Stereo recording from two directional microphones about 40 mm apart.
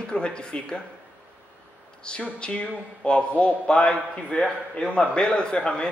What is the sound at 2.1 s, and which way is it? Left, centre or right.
A man's voice, left.